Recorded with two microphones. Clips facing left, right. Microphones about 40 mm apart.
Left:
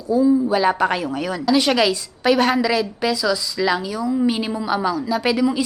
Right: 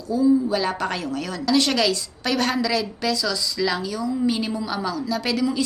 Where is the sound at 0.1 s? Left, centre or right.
Centre.